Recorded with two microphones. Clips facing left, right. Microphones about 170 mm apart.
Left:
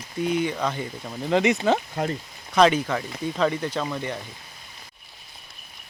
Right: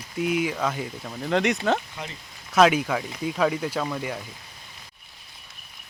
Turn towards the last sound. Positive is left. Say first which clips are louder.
# even
turn(degrees=-5)  # may be behind; listen again after turning